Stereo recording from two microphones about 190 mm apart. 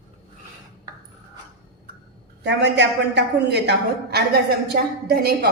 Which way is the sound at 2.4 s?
65° right (ahead or behind).